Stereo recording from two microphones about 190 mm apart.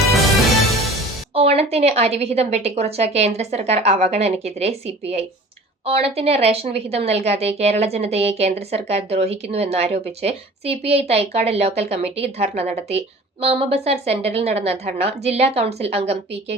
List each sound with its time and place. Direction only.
1.3 s a woman's voice: 30° right (ahead or behind)